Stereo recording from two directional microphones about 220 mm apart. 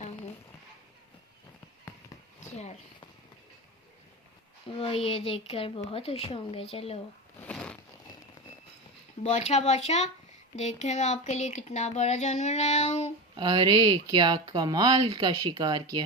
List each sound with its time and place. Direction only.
4.8 s speech: 25° left (ahead or behind)
7.4 s a sound: 5° left (ahead or behind)
9.2 s speech: 30° left (ahead or behind)
13.3 s speech: 20° right (ahead or behind)